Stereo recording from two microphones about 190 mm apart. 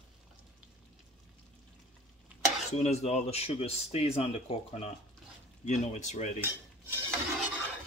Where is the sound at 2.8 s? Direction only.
35° left (ahead or behind).